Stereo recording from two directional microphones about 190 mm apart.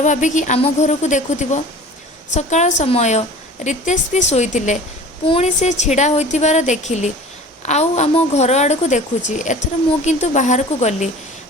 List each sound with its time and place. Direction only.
0.0 s a woman's voice: 40° left (ahead or behind)